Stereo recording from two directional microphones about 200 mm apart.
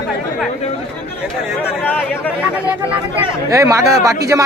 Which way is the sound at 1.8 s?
10° left (ahead or behind).